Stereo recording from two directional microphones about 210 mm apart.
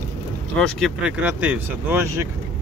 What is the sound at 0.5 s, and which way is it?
Speech, centre (ahead or behind).